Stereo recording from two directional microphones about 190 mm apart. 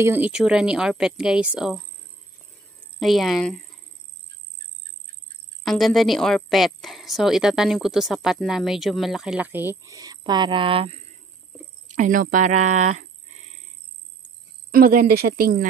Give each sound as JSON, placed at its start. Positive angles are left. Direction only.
{"t": 0.0, "sound": "a woman's voice", "side_deg": -10}
{"t": 3.0, "sound": "a woman's voice", "side_deg": 0}
{"t": 5.6, "sound": "a woman's voice", "side_deg": 0}
{"t": 11.9, "sound": "speech", "side_deg": -45}
{"t": 14.7, "sound": "speech", "side_deg": -50}